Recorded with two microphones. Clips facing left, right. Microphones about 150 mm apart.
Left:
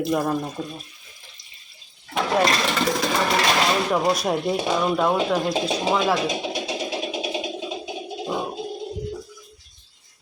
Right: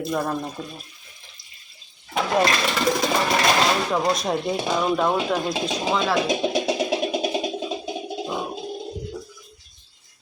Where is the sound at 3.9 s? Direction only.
5° left (ahead or behind).